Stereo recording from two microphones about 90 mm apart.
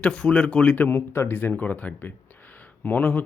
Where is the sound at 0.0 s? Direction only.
10° left (ahead or behind).